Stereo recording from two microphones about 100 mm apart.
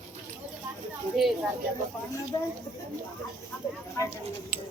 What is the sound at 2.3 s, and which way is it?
Speech, 40° left (ahead or behind).